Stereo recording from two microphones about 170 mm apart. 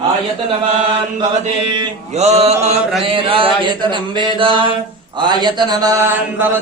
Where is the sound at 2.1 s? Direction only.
40° right (ahead or behind).